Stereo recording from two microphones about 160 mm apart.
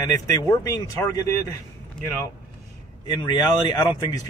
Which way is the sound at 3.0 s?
25° left (ahead or behind).